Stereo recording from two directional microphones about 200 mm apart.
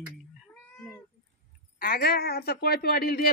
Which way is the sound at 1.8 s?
45° left (ahead or behind).